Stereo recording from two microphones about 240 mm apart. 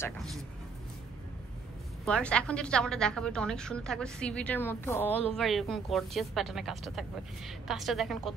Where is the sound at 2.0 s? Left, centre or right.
Centre.